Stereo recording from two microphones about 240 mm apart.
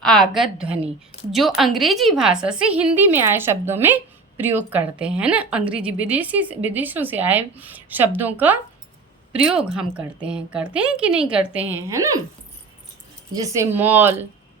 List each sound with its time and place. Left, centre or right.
0.0 s a woman's voice: centre
13.3 s a woman's voice: centre